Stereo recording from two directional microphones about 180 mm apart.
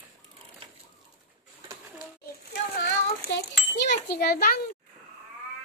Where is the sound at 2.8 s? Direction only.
80° left; by 4.5 s 60° left (ahead or behind).